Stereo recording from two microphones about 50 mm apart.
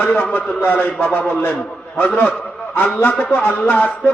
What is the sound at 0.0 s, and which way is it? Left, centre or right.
A man's voice, left.